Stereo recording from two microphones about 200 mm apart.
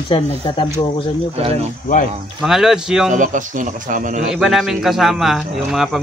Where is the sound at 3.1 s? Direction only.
40° right (ahead or behind).